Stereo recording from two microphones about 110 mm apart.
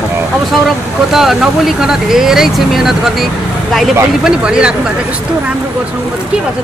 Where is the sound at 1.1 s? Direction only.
5° right (ahead or behind).